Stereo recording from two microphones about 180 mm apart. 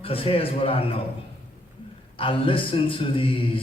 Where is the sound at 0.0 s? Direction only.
30° left (ahead or behind).